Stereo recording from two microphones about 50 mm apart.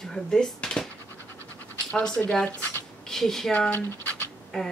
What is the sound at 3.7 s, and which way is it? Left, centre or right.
Speech, left.